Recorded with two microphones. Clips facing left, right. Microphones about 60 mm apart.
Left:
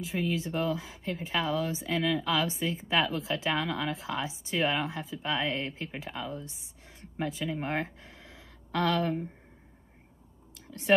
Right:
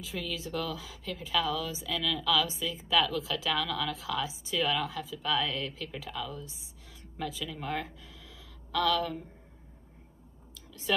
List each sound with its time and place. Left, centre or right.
0.0 s speech: left
10.7 s speech: left